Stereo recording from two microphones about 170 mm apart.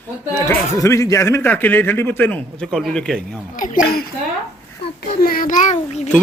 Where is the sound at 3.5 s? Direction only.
50° left (ahead or behind).